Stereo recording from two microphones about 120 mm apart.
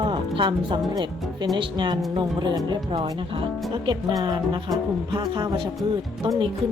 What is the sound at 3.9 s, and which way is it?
Speech, 40° right (ahead or behind).